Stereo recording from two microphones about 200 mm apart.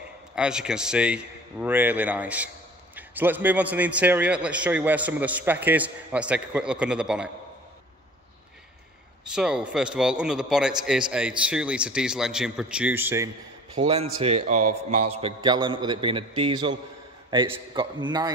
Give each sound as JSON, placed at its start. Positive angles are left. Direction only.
{"t": 0.4, "sound": "a man's voice", "side_deg": -5}
{"t": 9.3, "sound": "a man's voice", "side_deg": -5}
{"t": 13.7, "sound": "a man's voice", "side_deg": -30}